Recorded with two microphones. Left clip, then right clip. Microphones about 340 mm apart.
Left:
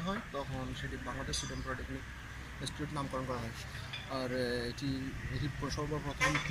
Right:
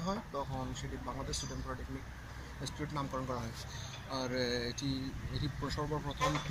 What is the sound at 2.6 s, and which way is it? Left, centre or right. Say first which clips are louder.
Speech: even; centre.